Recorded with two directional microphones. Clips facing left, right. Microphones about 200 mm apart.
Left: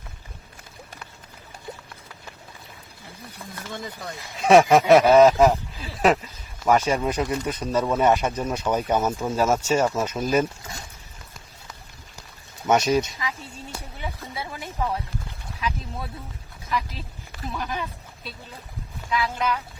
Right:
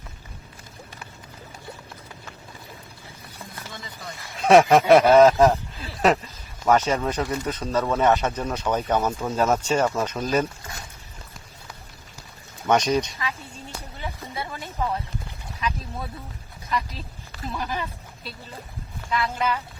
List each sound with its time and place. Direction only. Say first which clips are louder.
3.7 s speech: left 8 dB; 55° left (ahead or behind)
4.4 s speech: even; centre (ahead or behind)
12.6 s speech: left 1 dB; 5° left (ahead or behind)
14.2 s speech: right 1 dB; 5° left (ahead or behind)